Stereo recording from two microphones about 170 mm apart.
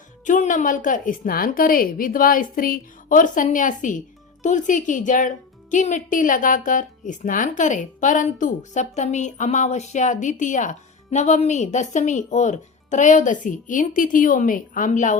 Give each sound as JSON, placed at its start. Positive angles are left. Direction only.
{"t": 0.3, "sound": "speech", "side_deg": 50}